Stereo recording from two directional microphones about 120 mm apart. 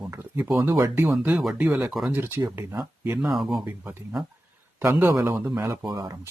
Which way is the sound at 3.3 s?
Centre (ahead or behind).